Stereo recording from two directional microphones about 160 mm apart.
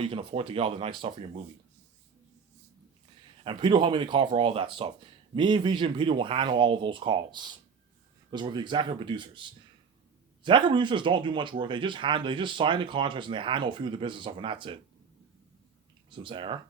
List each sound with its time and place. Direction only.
0.0 s speech: 35° right (ahead or behind)
3.4 s speech: 30° right (ahead or behind)
16.0 s speech: 30° right (ahead or behind)